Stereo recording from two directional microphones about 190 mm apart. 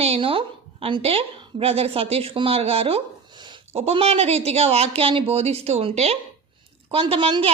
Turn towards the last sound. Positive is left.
turn(degrees=-25)  # may be behind; listen again after turning